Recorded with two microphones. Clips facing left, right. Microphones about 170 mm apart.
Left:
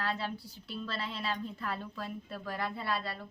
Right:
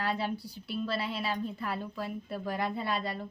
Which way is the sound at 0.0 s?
15° right (ahead or behind).